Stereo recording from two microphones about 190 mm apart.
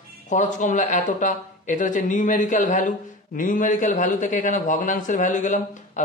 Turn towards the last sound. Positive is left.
turn(degrees=40)  # may be behind; listen again after turning